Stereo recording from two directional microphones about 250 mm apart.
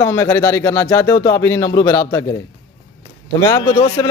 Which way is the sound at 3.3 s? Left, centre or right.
Centre.